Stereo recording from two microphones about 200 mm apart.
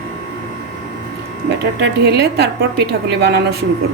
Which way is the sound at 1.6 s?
55° right (ahead or behind).